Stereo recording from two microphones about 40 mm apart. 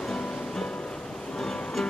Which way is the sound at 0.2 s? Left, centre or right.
Left.